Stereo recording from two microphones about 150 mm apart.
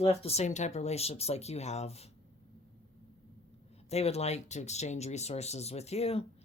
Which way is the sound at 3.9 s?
45° left (ahead or behind).